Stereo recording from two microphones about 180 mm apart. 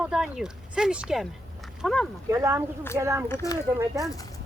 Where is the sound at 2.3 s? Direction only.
15° right (ahead or behind).